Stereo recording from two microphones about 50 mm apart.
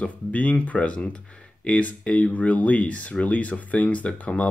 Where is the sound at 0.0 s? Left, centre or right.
Left.